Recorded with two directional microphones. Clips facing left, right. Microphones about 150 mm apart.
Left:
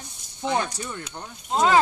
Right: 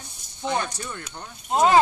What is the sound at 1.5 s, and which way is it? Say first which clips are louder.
Speech: right 2 dB; 10° right (ahead or behind).